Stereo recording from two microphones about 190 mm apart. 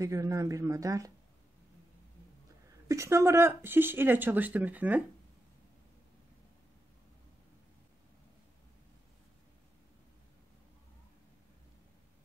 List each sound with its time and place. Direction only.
0.0 s speech: 15° right (ahead or behind)
2.9 s speech: 15° right (ahead or behind)